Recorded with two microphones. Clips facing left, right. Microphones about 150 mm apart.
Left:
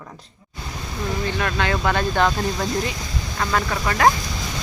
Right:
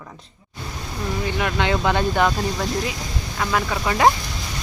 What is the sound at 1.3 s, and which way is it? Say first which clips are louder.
A woman's voice: right 3 dB; 15° right (ahead or behind).